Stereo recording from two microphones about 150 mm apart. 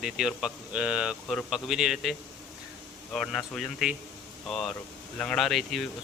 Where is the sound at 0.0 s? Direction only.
5° right (ahead or behind).